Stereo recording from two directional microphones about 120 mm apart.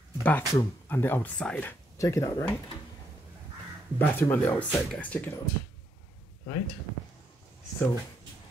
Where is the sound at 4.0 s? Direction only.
15° left (ahead or behind).